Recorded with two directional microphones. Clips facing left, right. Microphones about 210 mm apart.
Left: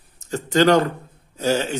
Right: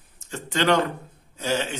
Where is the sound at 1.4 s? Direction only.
40° left (ahead or behind).